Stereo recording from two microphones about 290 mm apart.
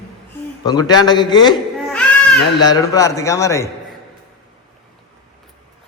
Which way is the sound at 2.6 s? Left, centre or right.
Centre.